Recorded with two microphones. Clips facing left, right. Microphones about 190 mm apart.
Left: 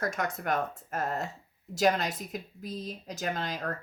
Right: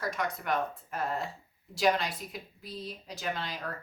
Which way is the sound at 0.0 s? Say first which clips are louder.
Left 2 dB; 45° left (ahead or behind).